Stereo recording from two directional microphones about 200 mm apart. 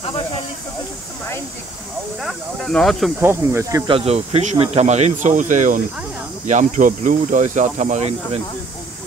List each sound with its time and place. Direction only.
2.2 s speech: centre (ahead or behind)
3.2 s speech: 10° right (ahead or behind); by 8.4 s 35° right (ahead or behind)